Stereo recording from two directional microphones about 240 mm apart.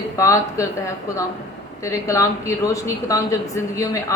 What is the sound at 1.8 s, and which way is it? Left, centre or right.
Speech, centre.